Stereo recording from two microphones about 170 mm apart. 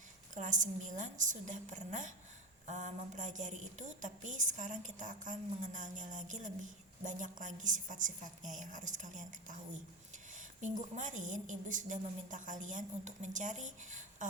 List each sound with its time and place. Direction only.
0.3 s a woman's voice: 45° right (ahead or behind)